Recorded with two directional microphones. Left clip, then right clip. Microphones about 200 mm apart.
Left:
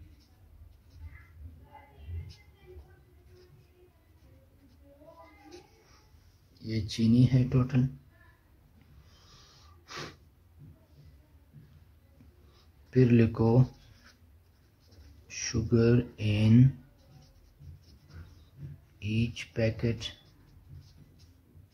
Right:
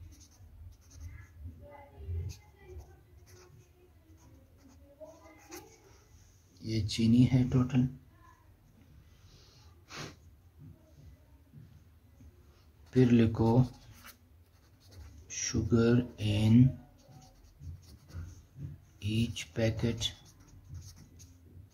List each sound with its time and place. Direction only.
6.6 s speech: 10° left (ahead or behind)
9.8 s snort: 20° left (ahead or behind)
12.9 s speech: 15° left (ahead or behind)
15.2 s speech: 10° left (ahead or behind)
18.9 s speech: 10° left (ahead or behind)